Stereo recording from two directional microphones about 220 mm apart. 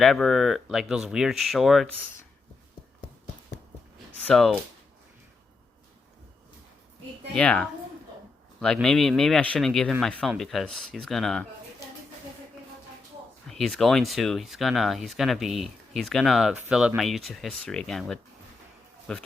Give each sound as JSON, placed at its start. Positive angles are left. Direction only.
{"t": 0.0, "sound": "speech", "side_deg": 0}
{"t": 4.2, "sound": "speech", "side_deg": 5}
{"t": 7.3, "sound": "speech", "side_deg": 5}
{"t": 13.5, "sound": "speech", "side_deg": 0}